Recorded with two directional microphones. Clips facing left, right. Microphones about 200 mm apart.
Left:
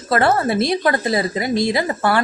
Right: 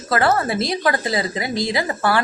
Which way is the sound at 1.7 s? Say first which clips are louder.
Left 2 dB; 25° left (ahead or behind).